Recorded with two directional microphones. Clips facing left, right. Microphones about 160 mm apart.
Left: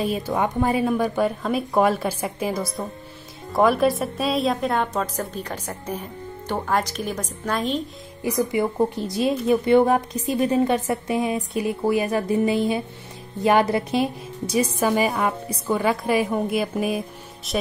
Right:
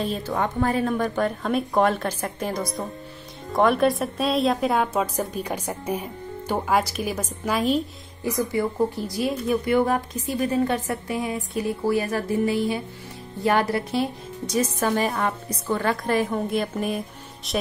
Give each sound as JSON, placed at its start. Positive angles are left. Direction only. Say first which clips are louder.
{"t": 0.0, "sound": "a woman's voice", "louder": "left 2 dB", "side_deg": 10}
{"t": 8.2, "sound": "a woman's voice", "louder": "left 2 dB", "side_deg": 15}